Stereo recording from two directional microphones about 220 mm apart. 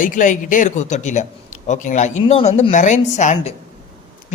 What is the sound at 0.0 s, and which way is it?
Speech, 35° left (ahead or behind).